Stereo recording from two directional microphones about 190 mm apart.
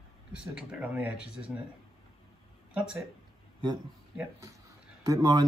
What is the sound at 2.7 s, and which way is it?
Speech, 5° right (ahead or behind).